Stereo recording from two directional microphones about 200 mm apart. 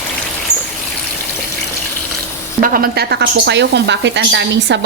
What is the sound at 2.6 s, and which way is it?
Speech, 45° right (ahead or behind).